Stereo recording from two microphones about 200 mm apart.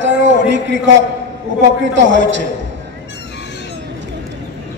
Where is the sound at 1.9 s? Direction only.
65° right (ahead or behind).